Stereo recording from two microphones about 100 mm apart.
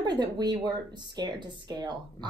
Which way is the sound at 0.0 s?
45° right (ahead or behind).